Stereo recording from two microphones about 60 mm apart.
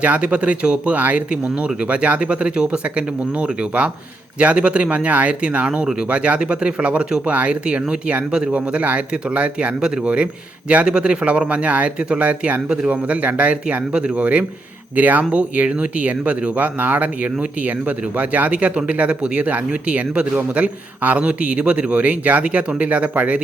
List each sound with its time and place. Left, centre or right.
0.0 s speech: right